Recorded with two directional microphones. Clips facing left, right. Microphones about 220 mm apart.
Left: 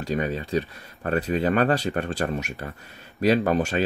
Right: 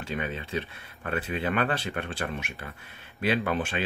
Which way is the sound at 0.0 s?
40° left (ahead or behind).